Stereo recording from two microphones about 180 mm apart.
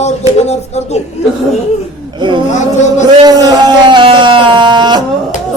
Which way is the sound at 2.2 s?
25° right (ahead or behind).